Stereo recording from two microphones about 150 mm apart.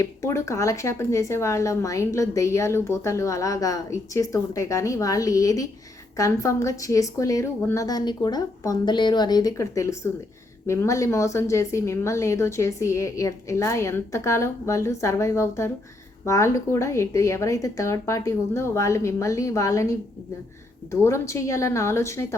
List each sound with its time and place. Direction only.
0.0 s speech: 20° left (ahead or behind)